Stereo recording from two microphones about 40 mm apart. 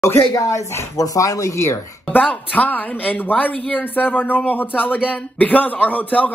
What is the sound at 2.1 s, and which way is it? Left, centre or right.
A woman's voice, left.